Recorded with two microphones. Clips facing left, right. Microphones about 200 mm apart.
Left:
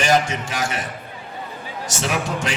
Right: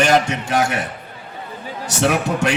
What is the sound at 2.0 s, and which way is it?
Speech, 65° right (ahead or behind).